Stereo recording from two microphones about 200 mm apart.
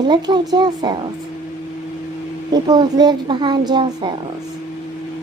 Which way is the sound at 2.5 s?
20° right (ahead or behind).